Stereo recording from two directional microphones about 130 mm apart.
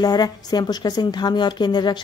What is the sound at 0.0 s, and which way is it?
A woman's voice, 30° left (ahead or behind).